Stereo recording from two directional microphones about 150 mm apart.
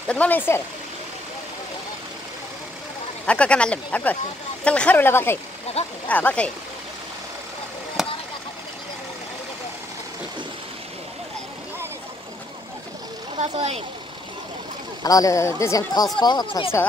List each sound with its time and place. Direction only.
0.1 s speech: 10° left (ahead or behind)
3.3 s speech: 10° left (ahead or behind)
8.0 s vehicle: centre (ahead or behind)
13.4 s speech: 45° right (ahead or behind)
15.0 s speech: 25° left (ahead or behind)